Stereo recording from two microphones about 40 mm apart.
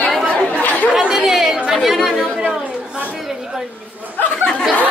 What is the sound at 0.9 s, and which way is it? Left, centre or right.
Chatter, centre.